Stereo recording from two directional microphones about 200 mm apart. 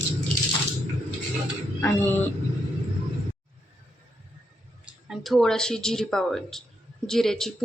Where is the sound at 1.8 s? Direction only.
10° left (ahead or behind).